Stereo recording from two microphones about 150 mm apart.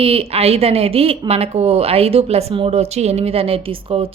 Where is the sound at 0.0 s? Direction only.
40° right (ahead or behind).